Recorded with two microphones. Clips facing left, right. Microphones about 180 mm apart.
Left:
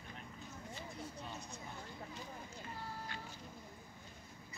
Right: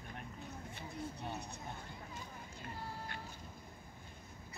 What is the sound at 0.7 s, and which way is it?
Vehicle, 60° right (ahead or behind).